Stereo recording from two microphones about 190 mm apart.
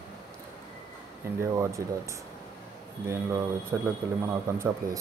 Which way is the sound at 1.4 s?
15° right (ahead or behind).